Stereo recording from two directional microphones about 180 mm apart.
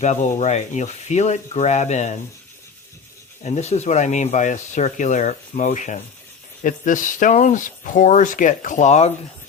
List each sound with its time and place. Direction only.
0.0 s speech: 40° left (ahead or behind)
3.4 s speech: 40° left (ahead or behind)